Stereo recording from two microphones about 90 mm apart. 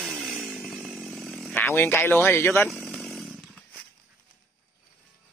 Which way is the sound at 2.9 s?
Centre (ahead or behind).